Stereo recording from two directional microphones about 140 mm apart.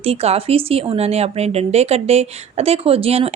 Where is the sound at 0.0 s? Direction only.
45° right (ahead or behind).